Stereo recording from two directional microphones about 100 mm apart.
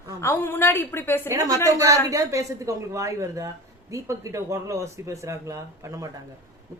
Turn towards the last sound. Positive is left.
turn(degrees=-35)  # may be behind; listen again after turning